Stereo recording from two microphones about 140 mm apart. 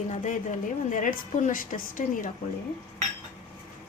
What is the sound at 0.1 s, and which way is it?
A woman's voice, 60° left (ahead or behind).